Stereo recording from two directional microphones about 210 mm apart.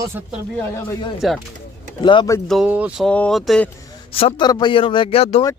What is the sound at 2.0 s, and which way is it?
Speech, 20° left (ahead or behind).